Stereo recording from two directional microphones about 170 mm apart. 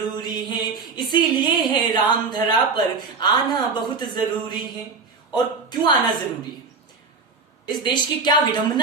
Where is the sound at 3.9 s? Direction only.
25° left (ahead or behind).